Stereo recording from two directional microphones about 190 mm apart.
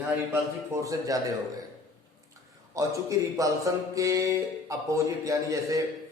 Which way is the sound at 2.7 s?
15° right (ahead or behind).